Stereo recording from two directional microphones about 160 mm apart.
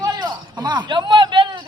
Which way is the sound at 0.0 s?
25° right (ahead or behind).